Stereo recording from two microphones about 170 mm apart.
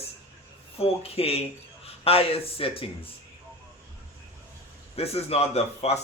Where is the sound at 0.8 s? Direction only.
35° left (ahead or behind).